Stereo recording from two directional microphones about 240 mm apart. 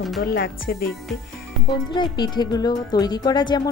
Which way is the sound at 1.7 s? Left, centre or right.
Centre.